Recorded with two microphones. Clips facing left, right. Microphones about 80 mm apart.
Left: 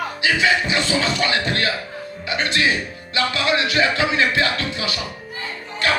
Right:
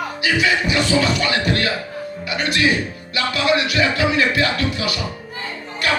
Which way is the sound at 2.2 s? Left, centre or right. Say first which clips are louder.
Right 1 dB; left.